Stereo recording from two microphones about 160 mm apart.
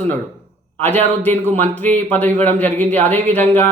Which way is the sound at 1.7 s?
10° left (ahead or behind).